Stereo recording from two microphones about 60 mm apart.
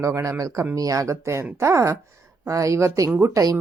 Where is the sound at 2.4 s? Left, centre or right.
Right.